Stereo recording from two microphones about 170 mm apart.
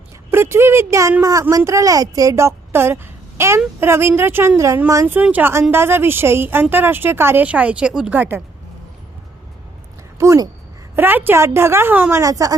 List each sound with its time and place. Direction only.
0.3 s a woman's voice: 15° right (ahead or behind)
10.2 s a woman's voice: 20° right (ahead or behind)